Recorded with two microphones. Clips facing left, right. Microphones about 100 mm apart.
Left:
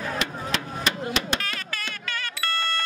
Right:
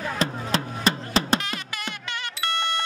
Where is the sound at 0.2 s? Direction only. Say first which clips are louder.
Right 3 dB; 35° right (ahead or behind).